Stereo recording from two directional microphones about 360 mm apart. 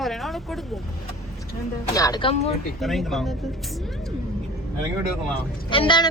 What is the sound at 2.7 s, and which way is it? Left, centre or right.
Speech, centre.